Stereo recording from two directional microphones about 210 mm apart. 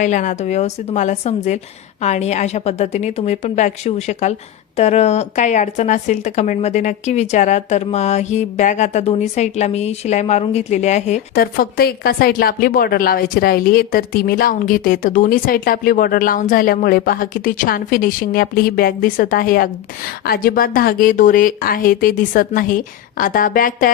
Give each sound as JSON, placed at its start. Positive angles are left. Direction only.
{"t": 0.0, "sound": "speech", "side_deg": 35}